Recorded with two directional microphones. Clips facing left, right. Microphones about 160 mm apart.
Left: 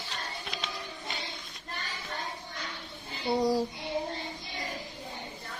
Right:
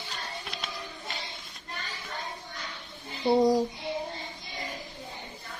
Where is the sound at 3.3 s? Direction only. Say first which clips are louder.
Right 5 dB; 20° right (ahead or behind).